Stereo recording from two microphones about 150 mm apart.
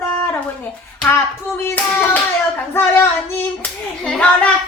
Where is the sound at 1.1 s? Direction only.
15° left (ahead or behind).